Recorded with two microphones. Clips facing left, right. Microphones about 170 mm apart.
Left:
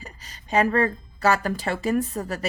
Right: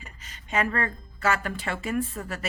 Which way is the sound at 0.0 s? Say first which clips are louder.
Left 4 dB; 35° left (ahead or behind).